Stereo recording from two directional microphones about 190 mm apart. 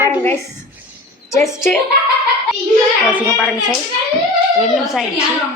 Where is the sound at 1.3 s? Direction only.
15° left (ahead or behind).